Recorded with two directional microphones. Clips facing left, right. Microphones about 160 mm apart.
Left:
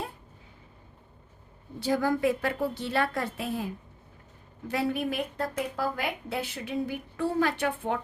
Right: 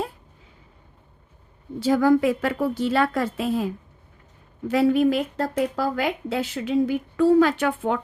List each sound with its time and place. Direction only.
1.8 s speech: 90° right
4.7 s speech: 90° right